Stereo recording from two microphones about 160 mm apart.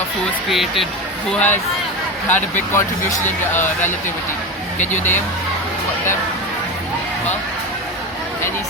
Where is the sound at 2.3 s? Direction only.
10° left (ahead or behind).